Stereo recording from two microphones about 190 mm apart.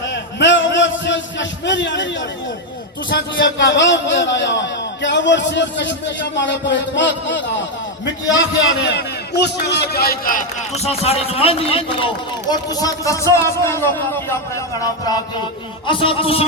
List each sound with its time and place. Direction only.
0.1 s a sound: 70° left (ahead or behind)
3.3 s a man's voice: 70° left (ahead or behind)
8.6 s a man's voice: 65° left (ahead or behind)
10.8 s speech: 35° left (ahead or behind)